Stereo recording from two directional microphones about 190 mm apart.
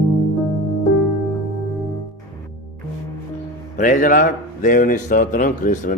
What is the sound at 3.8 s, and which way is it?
A man's voice, 45° left (ahead or behind).